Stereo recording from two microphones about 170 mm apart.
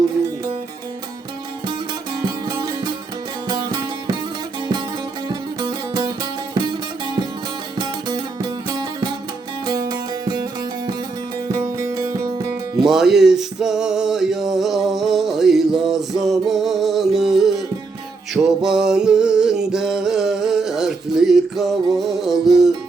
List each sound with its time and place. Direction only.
2.2 s music: 25° right (ahead or behind)
5.3 s music: 25° right (ahead or behind)
7.8 s music: 25° right (ahead or behind)
11.4 s music: 15° right (ahead or behind)
12.8 s music: 5° right (ahead or behind)